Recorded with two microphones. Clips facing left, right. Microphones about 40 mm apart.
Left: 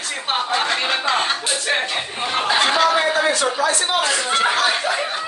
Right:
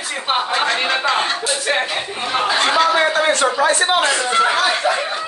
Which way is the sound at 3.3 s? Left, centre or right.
Right.